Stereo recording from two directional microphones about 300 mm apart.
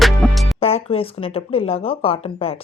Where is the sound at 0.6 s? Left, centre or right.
Centre.